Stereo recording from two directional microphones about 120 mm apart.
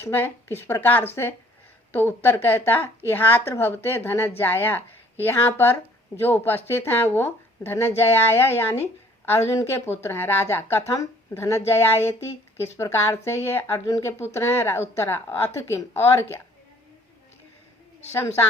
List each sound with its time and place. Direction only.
0.0 s a woman's voice: 20° left (ahead or behind)